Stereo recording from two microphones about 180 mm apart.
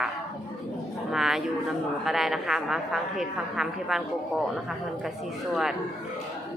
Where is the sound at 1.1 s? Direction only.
Centre (ahead or behind).